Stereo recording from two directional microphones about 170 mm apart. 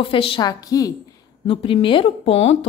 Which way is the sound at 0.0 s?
30° left (ahead or behind).